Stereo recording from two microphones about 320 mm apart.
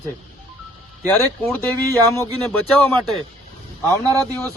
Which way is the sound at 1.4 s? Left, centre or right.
Centre.